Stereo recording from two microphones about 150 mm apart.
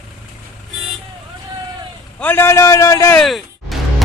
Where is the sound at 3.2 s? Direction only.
Centre (ahead or behind).